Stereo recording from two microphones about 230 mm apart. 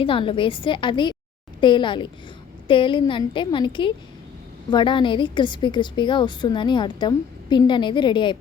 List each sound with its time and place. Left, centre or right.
0.0 s a woman's voice: left